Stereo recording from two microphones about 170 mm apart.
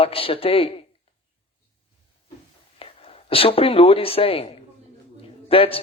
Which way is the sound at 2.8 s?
35° left (ahead or behind).